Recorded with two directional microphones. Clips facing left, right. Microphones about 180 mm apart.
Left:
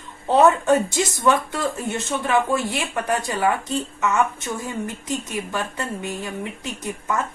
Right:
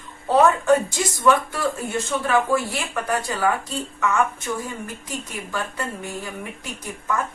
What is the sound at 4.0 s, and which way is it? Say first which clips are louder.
A woman's voice: right 1 dB; 20° left (ahead or behind).